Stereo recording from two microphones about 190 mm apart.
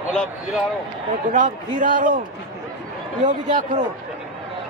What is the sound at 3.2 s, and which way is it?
Speech, 40° right (ahead or behind).